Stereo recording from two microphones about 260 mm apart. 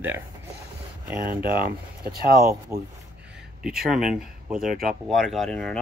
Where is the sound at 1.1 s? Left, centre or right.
Right.